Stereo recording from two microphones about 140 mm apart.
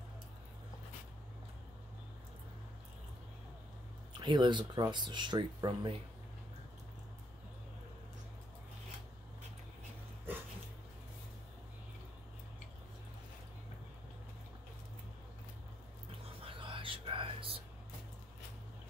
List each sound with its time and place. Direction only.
4.2 s speech: 30° right (ahead or behind)
16.4 s whispering: 40° right (ahead or behind)